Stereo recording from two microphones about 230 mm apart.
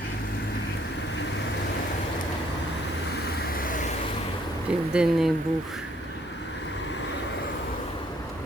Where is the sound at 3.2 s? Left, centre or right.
Left.